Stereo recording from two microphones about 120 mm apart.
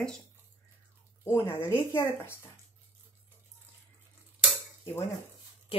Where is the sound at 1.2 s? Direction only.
20° left (ahead or behind).